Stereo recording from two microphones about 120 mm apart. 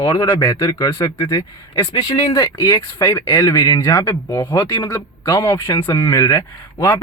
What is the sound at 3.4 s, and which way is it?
A man's voice, 35° left (ahead or behind).